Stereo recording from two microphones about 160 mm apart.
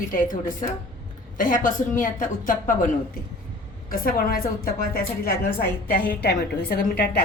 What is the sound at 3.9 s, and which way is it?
A woman's voice, 65° left (ahead or behind).